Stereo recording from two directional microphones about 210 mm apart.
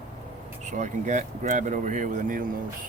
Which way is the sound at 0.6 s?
35° right (ahead or behind).